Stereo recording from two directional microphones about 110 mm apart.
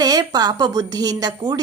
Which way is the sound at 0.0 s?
35° right (ahead or behind).